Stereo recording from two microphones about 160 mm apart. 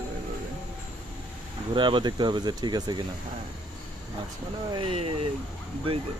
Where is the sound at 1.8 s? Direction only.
30° right (ahead or behind).